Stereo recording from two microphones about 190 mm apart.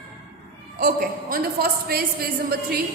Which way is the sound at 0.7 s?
45° right (ahead or behind).